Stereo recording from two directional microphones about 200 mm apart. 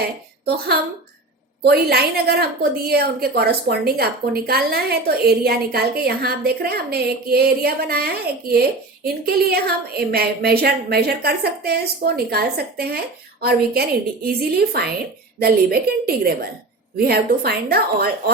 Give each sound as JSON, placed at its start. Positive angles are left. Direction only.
{"t": 0.0, "sound": "a woman's voice", "side_deg": -50}